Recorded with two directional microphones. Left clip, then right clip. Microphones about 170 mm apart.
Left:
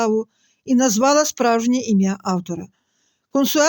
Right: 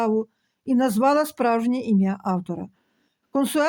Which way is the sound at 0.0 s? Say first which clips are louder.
Left 3 dB; 35° left (ahead or behind).